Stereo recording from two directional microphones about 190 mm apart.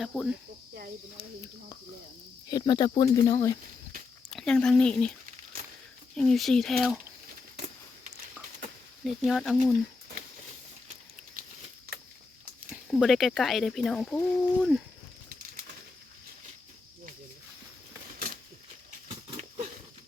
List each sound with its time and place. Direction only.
0.0 s speech: centre (ahead or behind)
2.5 s speech: 20° left (ahead or behind)
4.3 s speech: 5° left (ahead or behind)
6.1 s speech: centre (ahead or behind)
9.0 s speech: centre (ahead or behind)
12.7 s speech: centre (ahead or behind)
19.0 s pig: 40° right (ahead or behind)